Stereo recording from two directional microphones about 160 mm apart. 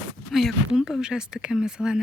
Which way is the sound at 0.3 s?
Centre (ahead or behind).